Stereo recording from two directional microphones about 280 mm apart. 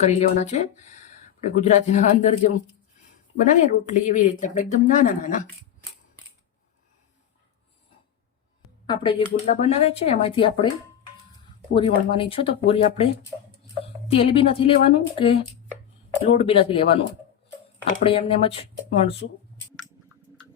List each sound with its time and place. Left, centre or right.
0.0 s speech: left
8.9 s speech: centre
11.7 s speech: centre
18.0 s speech: centre
19.2 s speech: left